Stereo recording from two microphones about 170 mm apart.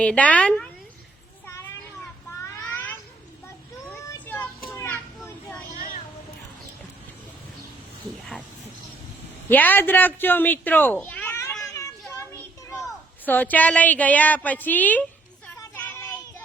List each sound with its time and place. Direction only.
0.0 s a woman's voice: 5° left (ahead or behind)
2.4 s a sound: 15° left (ahead or behind)
3.8 s child singing: 10° left (ahead or behind)
4.7 s children playing: 15° left (ahead or behind)
9.5 s speech: 10° left (ahead or behind)
12.1 s children playing: 15° left (ahead or behind)
13.2 s a woman's voice: 10° left (ahead or behind)
15.4 s a sound: 10° left (ahead or behind)